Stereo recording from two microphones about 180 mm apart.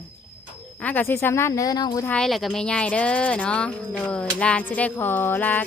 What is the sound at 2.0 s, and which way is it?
Speech, 5° left (ahead or behind).